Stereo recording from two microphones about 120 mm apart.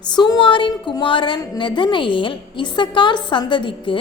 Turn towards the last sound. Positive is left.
turn(degrees=45)  # may be behind; listen again after turning